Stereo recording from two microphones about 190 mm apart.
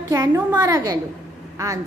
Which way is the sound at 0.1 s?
15° right (ahead or behind).